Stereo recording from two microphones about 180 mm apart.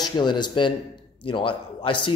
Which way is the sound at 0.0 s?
25° left (ahead or behind).